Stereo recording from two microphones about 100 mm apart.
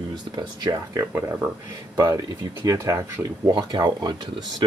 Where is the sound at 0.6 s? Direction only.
40° right (ahead or behind).